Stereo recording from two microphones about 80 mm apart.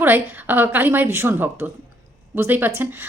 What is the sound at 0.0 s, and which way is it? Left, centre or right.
A woman's voice, right.